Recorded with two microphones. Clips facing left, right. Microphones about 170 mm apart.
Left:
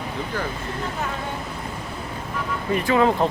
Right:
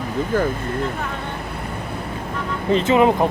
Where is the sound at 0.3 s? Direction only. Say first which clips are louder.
Right 9 dB; 50° right (ahead or behind).